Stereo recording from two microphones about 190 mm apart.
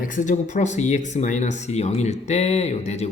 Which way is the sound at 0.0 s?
45° left (ahead or behind).